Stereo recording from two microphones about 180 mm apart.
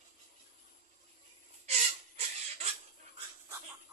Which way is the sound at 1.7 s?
35° right (ahead or behind).